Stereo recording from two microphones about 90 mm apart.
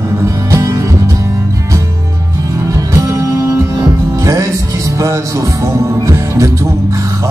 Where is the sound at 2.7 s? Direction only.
35° right (ahead or behind).